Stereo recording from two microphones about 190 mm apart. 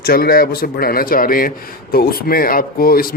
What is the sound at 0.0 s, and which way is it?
Speech, 50° left (ahead or behind).